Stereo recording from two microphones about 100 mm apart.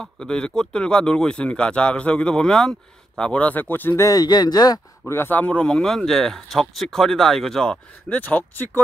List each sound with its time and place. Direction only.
0.0 s speech: 10° left (ahead or behind)
4.1 s speech: 40° left (ahead or behind)
5.0 s speech: 25° left (ahead or behind)